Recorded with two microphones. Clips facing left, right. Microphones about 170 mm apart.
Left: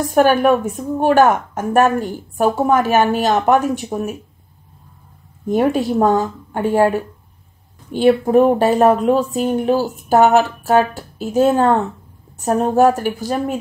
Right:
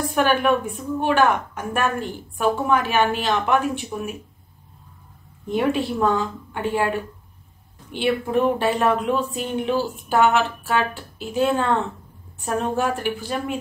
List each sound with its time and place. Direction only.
0.1 s a woman's voice: 45° left (ahead or behind)
5.5 s a woman's voice: 45° left (ahead or behind)